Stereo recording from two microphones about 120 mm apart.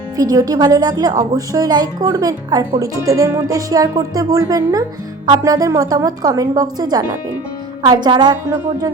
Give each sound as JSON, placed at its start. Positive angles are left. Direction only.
{"t": 0.2, "sound": "speech", "side_deg": -30}